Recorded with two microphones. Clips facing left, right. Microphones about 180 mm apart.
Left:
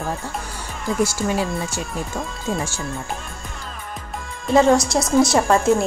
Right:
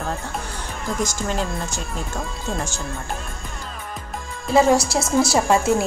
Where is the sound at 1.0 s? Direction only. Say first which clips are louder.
Left 4 dB; 10° left (ahead or behind).